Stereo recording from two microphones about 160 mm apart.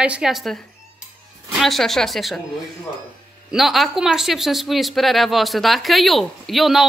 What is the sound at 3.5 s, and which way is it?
A woman's voice, centre (ahead or behind).